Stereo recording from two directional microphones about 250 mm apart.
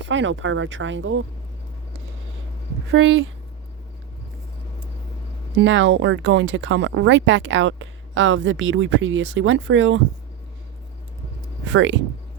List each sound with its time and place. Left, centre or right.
0.1 s speech: right
2.9 s speech: right
5.5 s speech: right
11.7 s speech: right